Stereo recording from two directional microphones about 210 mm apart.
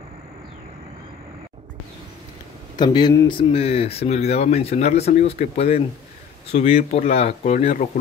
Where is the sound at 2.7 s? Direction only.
20° left (ahead or behind).